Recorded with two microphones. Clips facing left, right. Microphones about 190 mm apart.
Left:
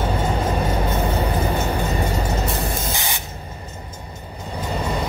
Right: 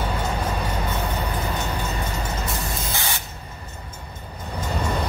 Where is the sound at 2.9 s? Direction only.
15° left (ahead or behind).